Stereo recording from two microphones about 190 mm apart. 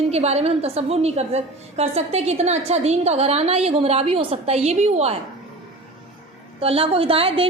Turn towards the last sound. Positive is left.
turn(degrees=-30)  # may be behind; listen again after turning